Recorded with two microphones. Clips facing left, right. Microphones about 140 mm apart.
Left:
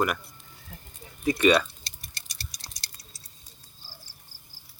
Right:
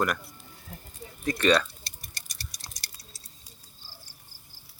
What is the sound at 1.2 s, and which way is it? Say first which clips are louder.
Speech: left 2 dB; 10° left (ahead or behind).